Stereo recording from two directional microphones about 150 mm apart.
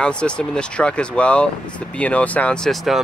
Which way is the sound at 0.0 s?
5° left (ahead or behind).